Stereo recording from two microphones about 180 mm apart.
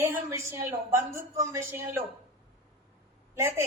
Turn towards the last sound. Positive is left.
turn(degrees=-15)  # may be behind; listen again after turning